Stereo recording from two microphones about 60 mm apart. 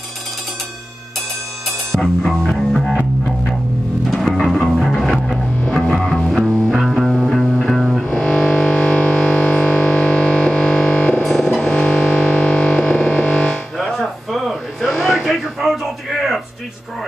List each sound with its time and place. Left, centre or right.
2.0 s music: centre
4.1 s music: centre
6.3 s music: centre
11.2 s music: centre
13.9 s a sound: centre